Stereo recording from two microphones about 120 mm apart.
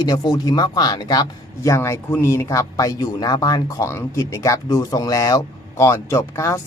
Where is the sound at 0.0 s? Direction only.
35° left (ahead or behind).